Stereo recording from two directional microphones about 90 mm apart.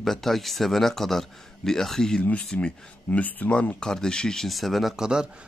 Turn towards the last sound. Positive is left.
turn(degrees=-5)  # may be behind; listen again after turning